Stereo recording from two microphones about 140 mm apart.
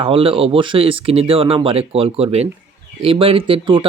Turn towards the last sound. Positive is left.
turn(degrees=-35)  # may be behind; listen again after turning